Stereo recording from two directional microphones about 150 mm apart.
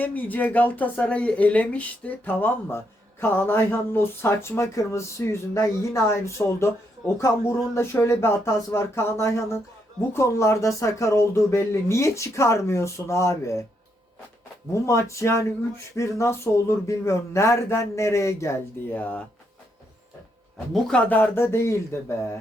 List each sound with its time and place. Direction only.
0.0 s speech: 10° left (ahead or behind)
14.7 s speech: 20° left (ahead or behind)
20.7 s speech: 5° left (ahead or behind)